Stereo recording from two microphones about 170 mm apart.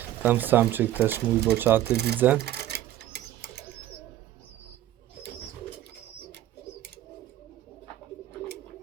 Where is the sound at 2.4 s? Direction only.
75° right (ahead or behind).